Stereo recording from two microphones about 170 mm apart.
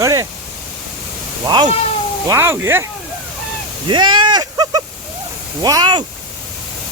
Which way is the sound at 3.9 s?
30° right (ahead or behind).